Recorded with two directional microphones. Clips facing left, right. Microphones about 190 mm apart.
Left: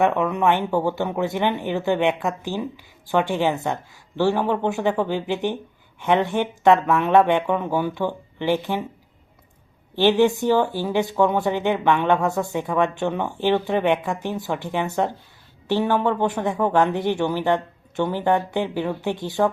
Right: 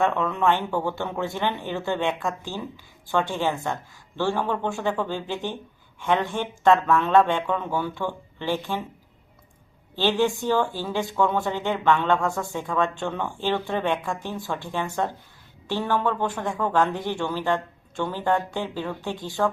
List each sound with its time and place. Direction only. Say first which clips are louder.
0.0 s speech: left 3 dB; 15° left (ahead or behind)
9.9 s speech: left 5 dB; 20° left (ahead or behind)